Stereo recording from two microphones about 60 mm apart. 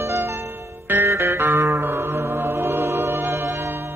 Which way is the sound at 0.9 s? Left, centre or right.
Right.